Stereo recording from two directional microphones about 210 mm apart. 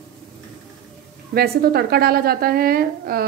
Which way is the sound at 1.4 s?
50° right (ahead or behind).